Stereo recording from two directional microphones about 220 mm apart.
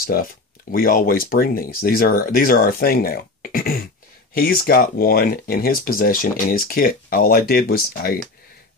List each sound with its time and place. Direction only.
0.0 s speech: 40° left (ahead or behind)